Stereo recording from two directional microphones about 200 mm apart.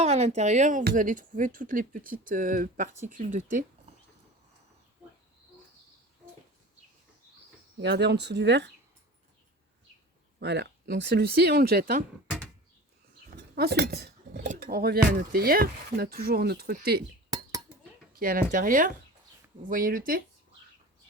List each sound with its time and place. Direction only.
0.0 s speech: 30° right (ahead or behind)
7.8 s speech: 60° right (ahead or behind)
10.4 s speech: 55° right (ahead or behind)
13.6 s speech: 55° right (ahead or behind)
18.1 s speech: 45° right (ahead or behind)